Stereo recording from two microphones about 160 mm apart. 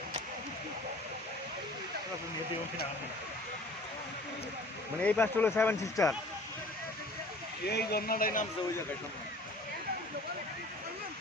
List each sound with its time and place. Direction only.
4.9 s speech: 10° left (ahead or behind)
7.7 s speech: 85° left; by 8.4 s 60° left (ahead or behind)